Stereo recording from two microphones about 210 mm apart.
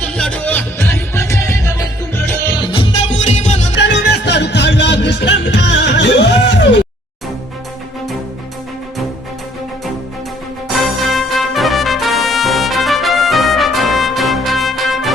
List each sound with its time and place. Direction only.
0.0 s music: 5° left (ahead or behind)
3.2 s music: 35° left (ahead or behind)
3.8 s music: 55° left (ahead or behind)
10.8 s music: centre (ahead or behind)